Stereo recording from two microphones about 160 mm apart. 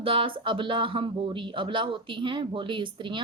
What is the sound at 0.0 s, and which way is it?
A woman's voice, 35° right (ahead or behind).